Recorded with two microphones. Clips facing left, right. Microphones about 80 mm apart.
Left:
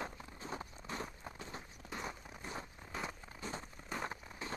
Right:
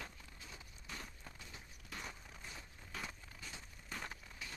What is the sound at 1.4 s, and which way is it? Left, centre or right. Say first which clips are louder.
Clip-clop: left 10 dB; left.